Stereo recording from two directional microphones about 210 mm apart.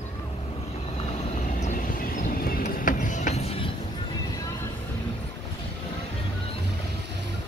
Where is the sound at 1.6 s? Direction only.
40° left (ahead or behind).